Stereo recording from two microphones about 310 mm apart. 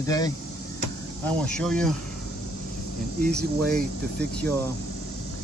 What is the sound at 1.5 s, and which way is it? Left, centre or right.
Speech, centre.